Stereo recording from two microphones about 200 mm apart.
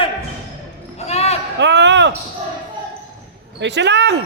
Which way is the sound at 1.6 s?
60° right (ahead or behind).